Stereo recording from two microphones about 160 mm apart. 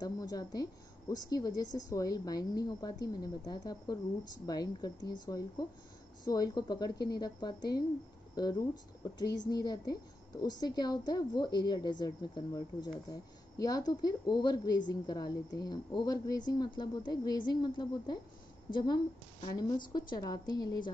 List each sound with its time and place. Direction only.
0.0 s a woman's voice: 25° left (ahead or behind)